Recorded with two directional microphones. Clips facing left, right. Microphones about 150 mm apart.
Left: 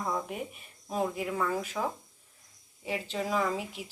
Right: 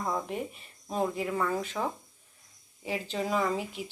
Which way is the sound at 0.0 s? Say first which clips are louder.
Right 1 dB; centre (ahead or behind).